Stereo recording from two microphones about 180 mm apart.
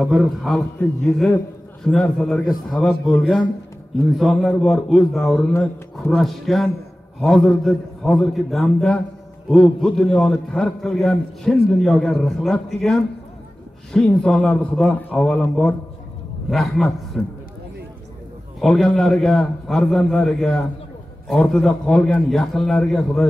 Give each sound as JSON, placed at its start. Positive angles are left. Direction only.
{"t": 0.0, "sound": "a man's voice", "side_deg": 0}
{"t": 18.6, "sound": "a man's voice", "side_deg": 0}